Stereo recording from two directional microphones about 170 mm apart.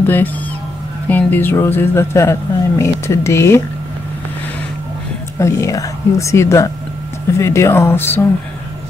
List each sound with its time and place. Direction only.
0.0 s speech: 10° left (ahead or behind)
5.4 s speech: 20° left (ahead or behind)